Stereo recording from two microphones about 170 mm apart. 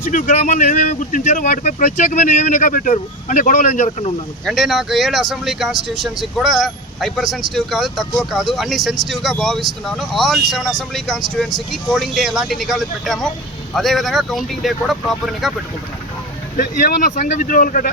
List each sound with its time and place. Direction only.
0.0 s speech: 50° left (ahead or behind)
4.4 s speech: centre (ahead or behind)
16.6 s speech: 55° left (ahead or behind)